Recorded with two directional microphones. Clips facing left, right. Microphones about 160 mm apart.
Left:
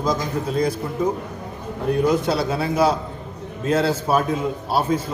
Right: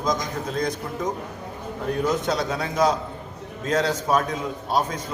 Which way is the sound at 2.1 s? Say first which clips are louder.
Left 2 dB; 10° left (ahead or behind).